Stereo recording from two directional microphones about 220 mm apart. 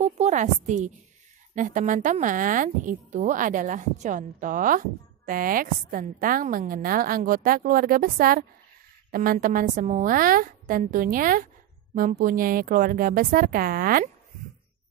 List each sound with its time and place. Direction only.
0.0 s a woman's voice: 30° right (ahead or behind)